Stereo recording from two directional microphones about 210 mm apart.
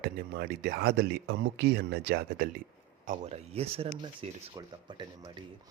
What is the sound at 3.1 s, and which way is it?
Speech, 30° right (ahead or behind).